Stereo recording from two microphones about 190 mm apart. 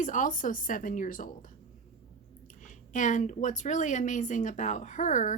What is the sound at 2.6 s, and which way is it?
A woman's voice, 40° left (ahead or behind).